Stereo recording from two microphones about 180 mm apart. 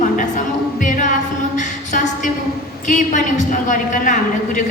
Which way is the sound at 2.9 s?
45° left (ahead or behind).